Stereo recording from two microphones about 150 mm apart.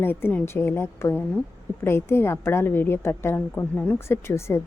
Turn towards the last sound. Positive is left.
turn(degrees=15)  # may be behind; listen again after turning